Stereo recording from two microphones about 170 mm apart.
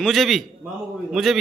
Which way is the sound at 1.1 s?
Centre (ahead or behind).